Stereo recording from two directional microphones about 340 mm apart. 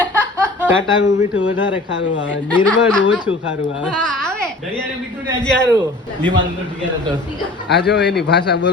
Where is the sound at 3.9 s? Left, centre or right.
Centre.